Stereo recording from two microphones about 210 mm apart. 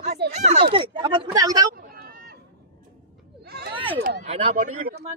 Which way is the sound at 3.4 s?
50° right (ahead or behind).